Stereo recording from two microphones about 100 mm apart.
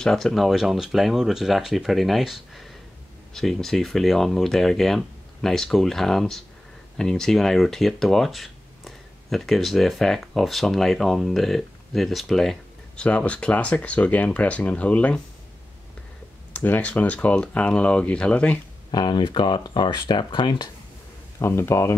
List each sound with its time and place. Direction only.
0.0 s speech: 5° left (ahead or behind)
16.5 s speech: 15° left (ahead or behind)
18.9 s speech: 50° left (ahead or behind)
21.4 s speech: 25° left (ahead or behind)